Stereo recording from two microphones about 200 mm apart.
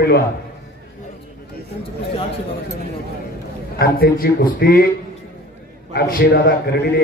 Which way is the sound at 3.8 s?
50° left (ahead or behind).